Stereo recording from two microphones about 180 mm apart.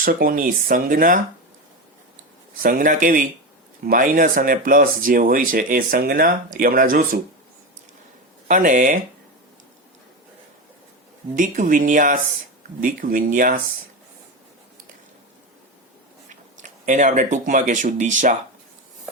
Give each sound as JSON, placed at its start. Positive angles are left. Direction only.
{"t": 0.0, "sound": "speech", "side_deg": -55}
{"t": 2.6, "sound": "speech", "side_deg": -50}
{"t": 8.4, "sound": "speech", "side_deg": -45}
{"t": 11.3, "sound": "speech", "side_deg": -45}
{"t": 16.6, "sound": "speech", "side_deg": -45}